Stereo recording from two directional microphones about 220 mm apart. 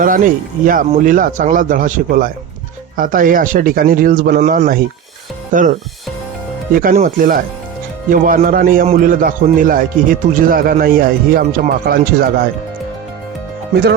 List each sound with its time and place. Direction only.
0.0 s a man's voice: 40° right (ahead or behind)
6.7 s a man's voice: 35° right (ahead or behind)